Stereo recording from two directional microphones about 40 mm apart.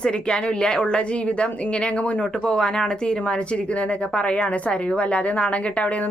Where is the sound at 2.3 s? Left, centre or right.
Centre.